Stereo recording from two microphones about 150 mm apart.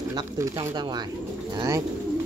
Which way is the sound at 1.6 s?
25° right (ahead or behind).